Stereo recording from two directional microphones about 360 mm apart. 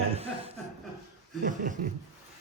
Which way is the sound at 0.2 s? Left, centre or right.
Centre.